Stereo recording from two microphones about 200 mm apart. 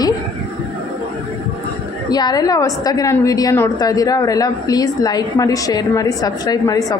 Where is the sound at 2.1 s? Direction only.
20° left (ahead or behind).